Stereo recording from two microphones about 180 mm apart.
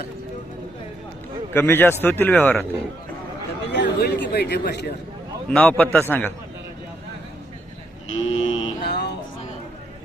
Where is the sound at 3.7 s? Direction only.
70° left (ahead or behind).